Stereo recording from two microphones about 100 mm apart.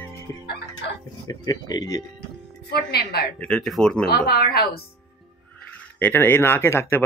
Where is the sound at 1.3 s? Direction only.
40° left (ahead or behind).